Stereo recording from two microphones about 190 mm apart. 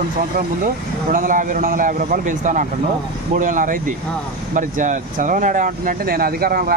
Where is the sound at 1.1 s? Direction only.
45° right (ahead or behind).